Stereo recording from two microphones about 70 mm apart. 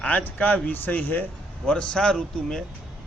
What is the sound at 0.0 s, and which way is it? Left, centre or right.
A man's voice, centre.